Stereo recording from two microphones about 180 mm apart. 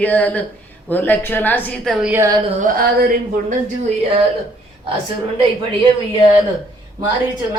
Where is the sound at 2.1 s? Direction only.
15° right (ahead or behind).